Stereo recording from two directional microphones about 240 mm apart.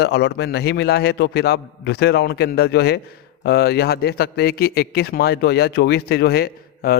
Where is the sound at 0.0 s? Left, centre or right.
Left.